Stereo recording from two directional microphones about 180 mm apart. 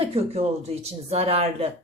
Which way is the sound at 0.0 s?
30° right (ahead or behind).